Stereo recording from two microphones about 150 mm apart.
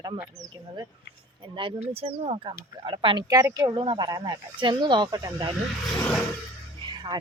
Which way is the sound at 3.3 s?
20° right (ahead or behind).